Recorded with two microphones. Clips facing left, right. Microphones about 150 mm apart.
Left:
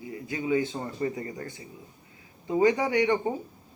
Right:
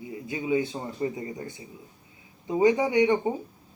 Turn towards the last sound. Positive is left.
turn(degrees=-20)  # may be behind; listen again after turning